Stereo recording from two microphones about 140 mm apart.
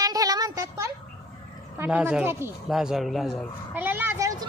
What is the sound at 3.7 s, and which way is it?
Vehicle, 15° right (ahead or behind).